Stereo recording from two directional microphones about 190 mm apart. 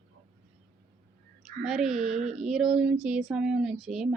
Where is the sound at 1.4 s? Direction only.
5° right (ahead or behind).